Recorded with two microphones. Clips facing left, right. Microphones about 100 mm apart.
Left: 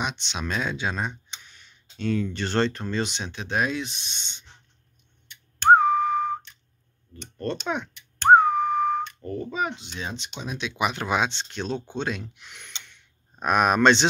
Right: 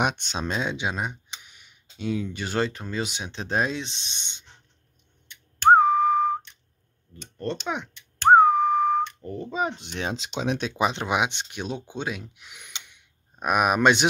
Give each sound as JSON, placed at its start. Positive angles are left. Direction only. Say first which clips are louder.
{"t": 0.0, "sound": "speech", "louder": "right 5 dB", "side_deg": -50}
{"t": 0.4, "sound": "speech", "louder": "even", "side_deg": -20}
{"t": 3.3, "sound": "speech", "louder": "even", "side_deg": -30}
{"t": 5.8, "sound": "whistling", "louder": "right 2 dB", "side_deg": -15}
{"t": 7.6, "sound": "speech", "louder": "left 1 dB", "side_deg": -15}
{"t": 8.4, "sound": "whistling", "louder": "right 3 dB", "side_deg": -15}
{"t": 9.5, "sound": "speech", "louder": "right 2 dB", "side_deg": -30}
{"t": 9.9, "sound": "speech", "louder": "right 5 dB", "side_deg": -80}
{"t": 10.8, "sound": "speech", "louder": "left 1 dB", "side_deg": -20}